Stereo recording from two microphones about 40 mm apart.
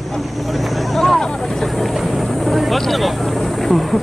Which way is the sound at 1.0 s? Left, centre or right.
Centre.